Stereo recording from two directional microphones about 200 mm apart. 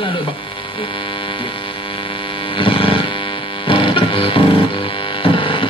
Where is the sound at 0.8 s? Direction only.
25° left (ahead or behind).